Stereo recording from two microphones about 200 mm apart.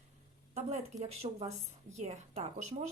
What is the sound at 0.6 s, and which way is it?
Speech, 35° right (ahead or behind).